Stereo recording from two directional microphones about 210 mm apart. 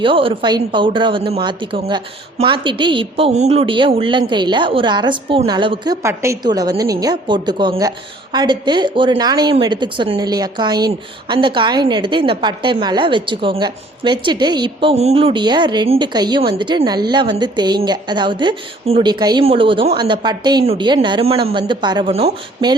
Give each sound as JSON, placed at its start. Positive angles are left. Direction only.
{"t": 0.0, "sound": "a woman's voice", "side_deg": -25}